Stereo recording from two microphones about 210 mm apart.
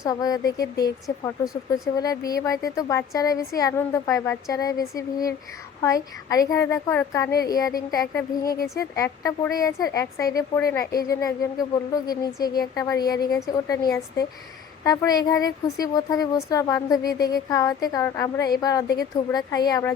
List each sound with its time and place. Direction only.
0.0 s a woman's voice: 15° left (ahead or behind)
5.8 s a woman's voice: 15° left (ahead or behind)